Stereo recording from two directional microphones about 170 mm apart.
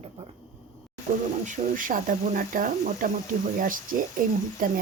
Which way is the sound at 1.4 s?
50° right (ahead or behind).